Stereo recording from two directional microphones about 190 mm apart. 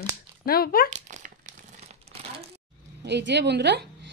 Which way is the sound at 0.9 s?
40° right (ahead or behind).